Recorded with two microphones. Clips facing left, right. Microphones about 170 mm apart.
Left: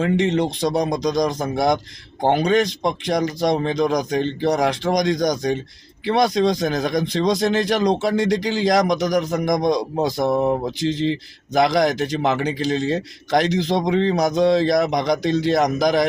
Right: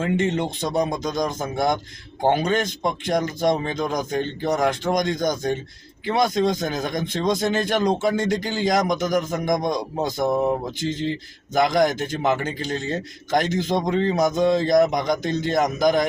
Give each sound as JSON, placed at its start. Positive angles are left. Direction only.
{"t": 0.0, "sound": "a man's voice", "side_deg": 0}
{"t": 12.5, "sound": "speech", "side_deg": 90}
{"t": 12.8, "sound": "a man's voice", "side_deg": 0}